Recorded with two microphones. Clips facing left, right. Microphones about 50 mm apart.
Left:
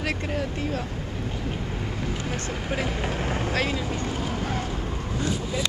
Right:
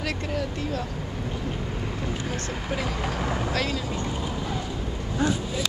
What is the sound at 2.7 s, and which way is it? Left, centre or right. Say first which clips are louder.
Speech: left 1 dB; left.